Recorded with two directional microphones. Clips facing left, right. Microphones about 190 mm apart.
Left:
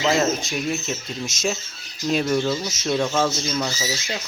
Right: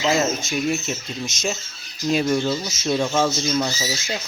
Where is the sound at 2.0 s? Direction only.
5° right (ahead or behind).